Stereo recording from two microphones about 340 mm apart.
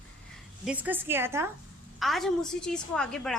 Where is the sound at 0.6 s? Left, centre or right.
Centre.